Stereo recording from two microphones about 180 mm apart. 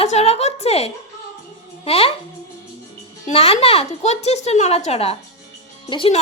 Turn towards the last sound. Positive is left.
turn(degrees=30)  # may be behind; listen again after turning